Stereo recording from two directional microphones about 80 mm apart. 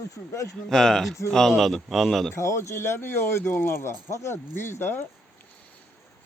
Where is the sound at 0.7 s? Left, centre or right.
Centre.